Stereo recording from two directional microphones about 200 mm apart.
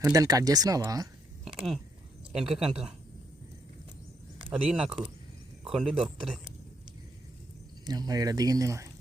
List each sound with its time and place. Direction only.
0.0 s speech: 15° right (ahead or behind)
1.5 s speech: centre (ahead or behind)
4.7 s speech: 5° right (ahead or behind)
7.9 s speech: 20° right (ahead or behind)